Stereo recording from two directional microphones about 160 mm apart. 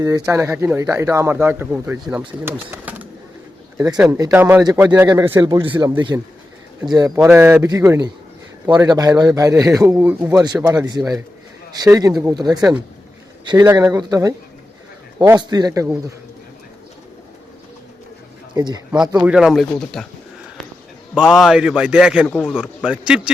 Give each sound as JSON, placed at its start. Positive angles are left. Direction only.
{"t": 0.3, "sound": "speech", "side_deg": -15}
{"t": 5.5, "sound": "a man's voice", "side_deg": -30}
{"t": 7.2, "sound": "a man's voice", "side_deg": -10}
{"t": 10.4, "sound": "a man's voice", "side_deg": -25}
{"t": 18.5, "sound": "speech", "side_deg": -25}
{"t": 19.2, "sound": "a man's voice", "side_deg": -5}
{"t": 21.2, "sound": "a man's voice", "side_deg": 0}